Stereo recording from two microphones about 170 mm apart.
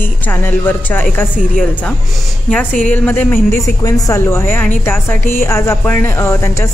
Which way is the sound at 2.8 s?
10° left (ahead or behind).